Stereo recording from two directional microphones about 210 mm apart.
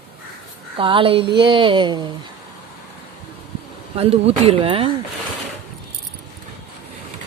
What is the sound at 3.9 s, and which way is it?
Speech, 30° right (ahead or behind).